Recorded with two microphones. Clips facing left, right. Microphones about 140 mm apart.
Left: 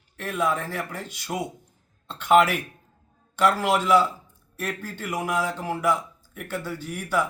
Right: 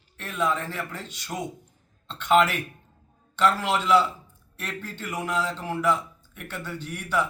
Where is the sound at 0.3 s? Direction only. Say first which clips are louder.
Left 1 dB; 10° left (ahead or behind).